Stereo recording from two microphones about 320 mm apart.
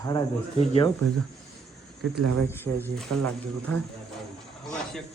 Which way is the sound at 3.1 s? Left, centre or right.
Right.